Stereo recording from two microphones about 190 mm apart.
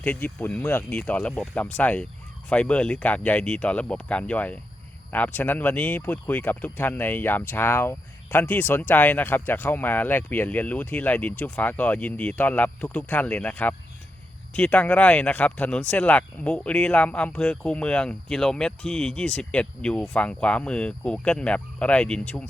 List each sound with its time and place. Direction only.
0.0 s speech: 10° left (ahead or behind)